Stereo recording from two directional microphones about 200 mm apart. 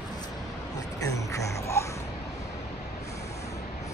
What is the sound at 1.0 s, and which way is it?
Music, 15° left (ahead or behind).